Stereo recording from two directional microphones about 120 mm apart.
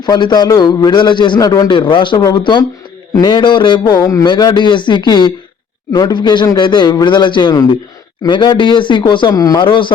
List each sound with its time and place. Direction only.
0.0 s a man's voice: 35° left (ahead or behind)